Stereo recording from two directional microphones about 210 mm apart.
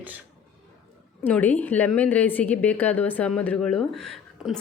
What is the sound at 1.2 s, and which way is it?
A woman's voice, 10° left (ahead or behind).